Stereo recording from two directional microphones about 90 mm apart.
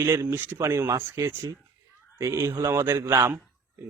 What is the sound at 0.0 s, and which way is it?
A man's voice, 30° right (ahead or behind).